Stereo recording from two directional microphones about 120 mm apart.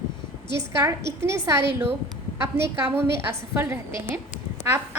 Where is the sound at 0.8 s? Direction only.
25° right (ahead or behind).